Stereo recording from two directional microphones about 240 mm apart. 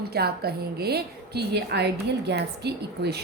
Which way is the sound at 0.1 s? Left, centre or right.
Right.